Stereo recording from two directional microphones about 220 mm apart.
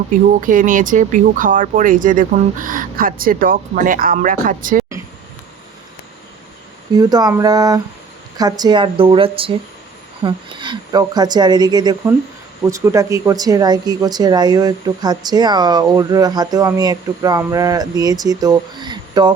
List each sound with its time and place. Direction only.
0.4 s speech: 35° right (ahead or behind)
6.9 s speech: 15° right (ahead or behind)